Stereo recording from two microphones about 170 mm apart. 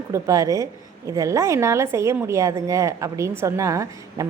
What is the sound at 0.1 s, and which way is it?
A woman's voice, 20° right (ahead or behind).